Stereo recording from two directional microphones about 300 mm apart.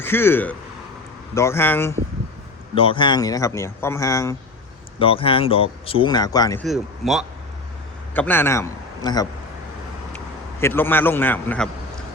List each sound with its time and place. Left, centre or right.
0.0 s a man's voice: centre
6.7 s a man's voice: centre
10.6 s a man's voice: centre